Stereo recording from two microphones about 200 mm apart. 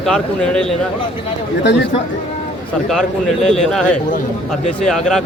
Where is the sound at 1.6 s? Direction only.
60° left (ahead or behind).